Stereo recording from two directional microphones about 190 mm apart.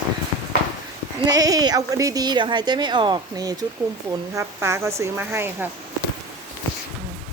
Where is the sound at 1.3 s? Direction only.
20° right (ahead or behind).